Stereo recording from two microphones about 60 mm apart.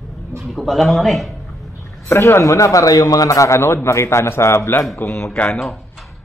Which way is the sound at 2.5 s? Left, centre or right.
Left.